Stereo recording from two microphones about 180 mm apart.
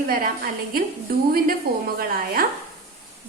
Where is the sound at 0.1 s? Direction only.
55° right (ahead or behind).